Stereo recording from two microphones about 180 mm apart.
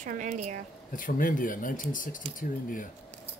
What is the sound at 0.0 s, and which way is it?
Speech, 45° right (ahead or behind).